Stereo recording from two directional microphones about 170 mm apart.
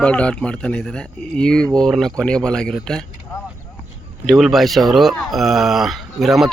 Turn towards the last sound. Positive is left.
turn(degrees=0)  # may be behind; listen again after turning